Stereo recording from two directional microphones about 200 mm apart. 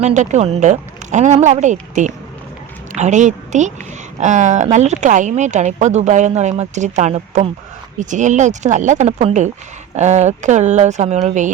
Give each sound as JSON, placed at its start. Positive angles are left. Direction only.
{"t": 0.0, "sound": "a woman's voice", "side_deg": -35}